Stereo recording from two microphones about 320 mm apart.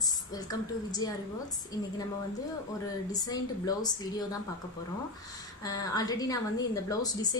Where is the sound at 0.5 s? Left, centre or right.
Centre.